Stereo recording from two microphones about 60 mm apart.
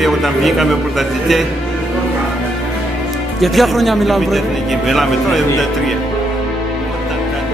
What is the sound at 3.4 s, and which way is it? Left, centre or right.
Speech, centre.